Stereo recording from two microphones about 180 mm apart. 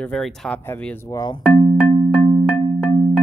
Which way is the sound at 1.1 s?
20° left (ahead or behind).